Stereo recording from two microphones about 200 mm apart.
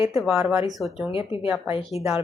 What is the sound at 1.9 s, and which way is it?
Speech, 30° left (ahead or behind).